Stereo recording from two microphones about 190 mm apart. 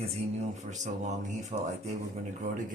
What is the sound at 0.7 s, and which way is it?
Speech, 40° right (ahead or behind).